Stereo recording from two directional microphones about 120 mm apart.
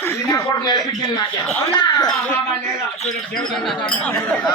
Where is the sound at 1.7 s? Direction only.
35° left (ahead or behind).